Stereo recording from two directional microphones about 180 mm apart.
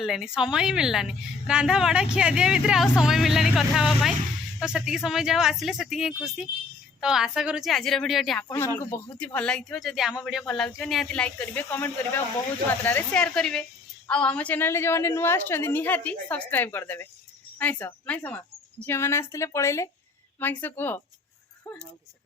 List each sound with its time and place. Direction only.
0.0 s a woman's voice: centre (ahead or behind)
8.4 s a woman's voice: 15° left (ahead or behind)
21.6 s a sound: 10° left (ahead or behind)